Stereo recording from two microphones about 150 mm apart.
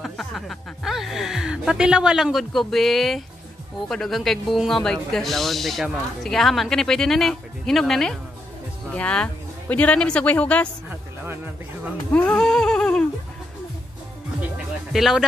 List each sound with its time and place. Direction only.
0.0 s speech: centre (ahead or behind)
12.1 s humming: 10° left (ahead or behind)
14.9 s speech: centre (ahead or behind)